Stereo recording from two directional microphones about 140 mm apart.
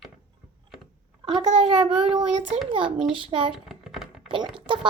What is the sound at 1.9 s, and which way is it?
Child singing, 5° right (ahead or behind).